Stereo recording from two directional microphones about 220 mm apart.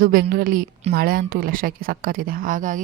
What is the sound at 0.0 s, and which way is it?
A woman's voice, 40° right (ahead or behind).